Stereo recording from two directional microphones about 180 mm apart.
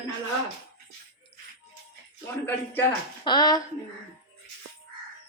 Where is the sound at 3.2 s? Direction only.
25° left (ahead or behind).